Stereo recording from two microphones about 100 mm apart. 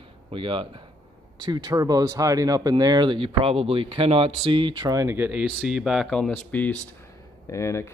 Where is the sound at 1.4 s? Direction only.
45° right (ahead or behind).